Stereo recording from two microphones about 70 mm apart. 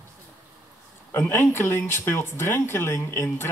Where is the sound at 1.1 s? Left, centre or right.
Left.